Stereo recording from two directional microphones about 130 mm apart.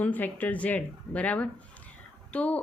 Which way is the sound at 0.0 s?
10° left (ahead or behind).